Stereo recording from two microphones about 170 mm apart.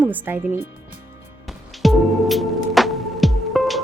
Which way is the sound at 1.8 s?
Centre (ahead or behind).